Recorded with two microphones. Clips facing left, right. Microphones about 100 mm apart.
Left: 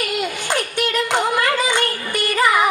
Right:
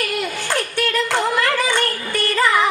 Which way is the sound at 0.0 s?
20° left (ahead or behind).